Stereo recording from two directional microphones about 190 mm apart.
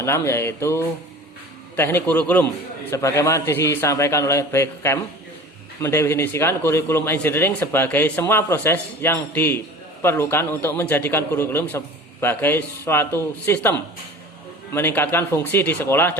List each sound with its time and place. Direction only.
0.0 s a man's voice: 15° left (ahead or behind)